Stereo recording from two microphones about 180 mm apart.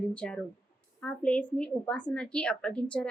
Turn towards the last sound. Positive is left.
turn(degrees=5)  # may be behind; listen again after turning